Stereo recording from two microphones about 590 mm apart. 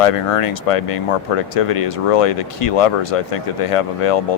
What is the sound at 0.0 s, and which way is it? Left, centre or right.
Speech, left.